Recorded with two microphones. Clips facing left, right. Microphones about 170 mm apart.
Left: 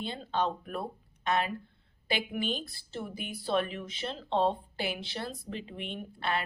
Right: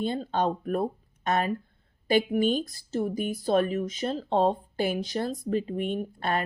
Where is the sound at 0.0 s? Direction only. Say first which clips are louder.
Right 5 dB; 45° right (ahead or behind).